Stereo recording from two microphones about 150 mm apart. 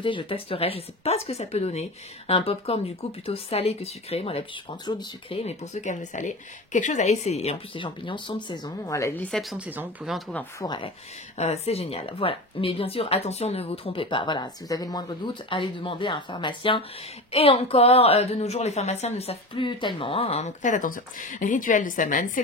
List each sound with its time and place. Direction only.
0.0 s a woman's voice: 35° left (ahead or behind)
5.4 s a woman's voice: 45° left (ahead or behind); by 9.4 s 10° left (ahead or behind)
9.4 s speech: centre (ahead or behind)
10.6 s speech: 30° left (ahead or behind)
11.3 s a woman's voice: 45° left (ahead or behind); by 22.4 s 65° left (ahead or behind)